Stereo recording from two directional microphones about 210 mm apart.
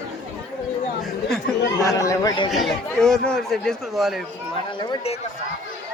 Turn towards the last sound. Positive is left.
turn(degrees=30)  # may be behind; listen again after turning